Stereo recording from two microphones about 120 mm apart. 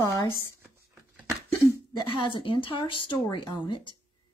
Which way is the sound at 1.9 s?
45° left (ahead or behind).